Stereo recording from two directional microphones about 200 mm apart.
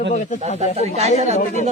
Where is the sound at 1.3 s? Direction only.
35° left (ahead or behind).